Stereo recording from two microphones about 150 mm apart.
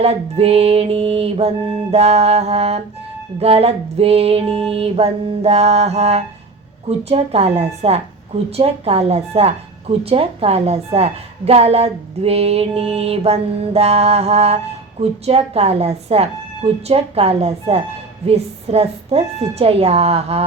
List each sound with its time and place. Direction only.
0.0 s a woman's voice: 45° right (ahead or behind)